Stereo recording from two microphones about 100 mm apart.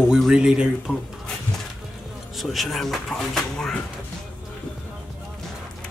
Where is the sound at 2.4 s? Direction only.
Centre (ahead or behind).